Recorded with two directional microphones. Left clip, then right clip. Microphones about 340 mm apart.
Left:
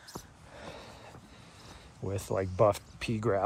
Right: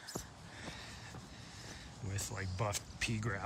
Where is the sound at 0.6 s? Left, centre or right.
Centre.